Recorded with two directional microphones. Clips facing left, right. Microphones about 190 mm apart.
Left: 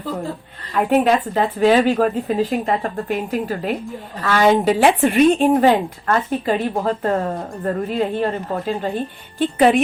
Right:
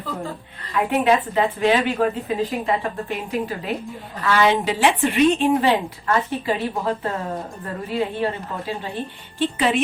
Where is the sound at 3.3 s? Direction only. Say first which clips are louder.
Left 3 dB; 45° left (ahead or behind).